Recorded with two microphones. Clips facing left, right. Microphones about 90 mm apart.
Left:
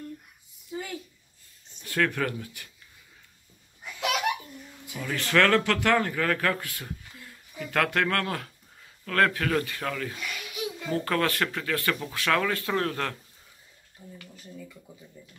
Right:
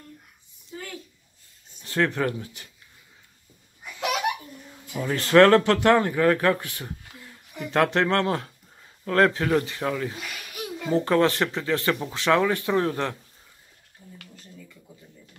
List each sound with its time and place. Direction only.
0.7 s a sound: 10° left (ahead or behind)
1.8 s speech: 30° right (ahead or behind)
4.9 s speech: 35° right (ahead or behind)